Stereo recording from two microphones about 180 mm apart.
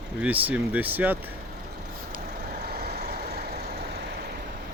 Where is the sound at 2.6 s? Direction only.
60° right (ahead or behind).